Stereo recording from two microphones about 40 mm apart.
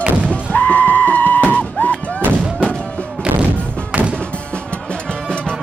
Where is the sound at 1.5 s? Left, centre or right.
Left.